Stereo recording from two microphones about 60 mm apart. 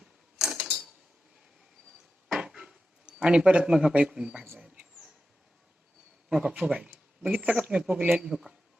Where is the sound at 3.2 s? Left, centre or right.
Centre.